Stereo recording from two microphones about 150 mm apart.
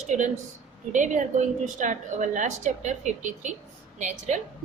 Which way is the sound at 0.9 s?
55° right (ahead or behind).